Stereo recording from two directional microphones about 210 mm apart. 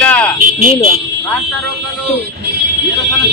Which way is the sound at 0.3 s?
40° right (ahead or behind).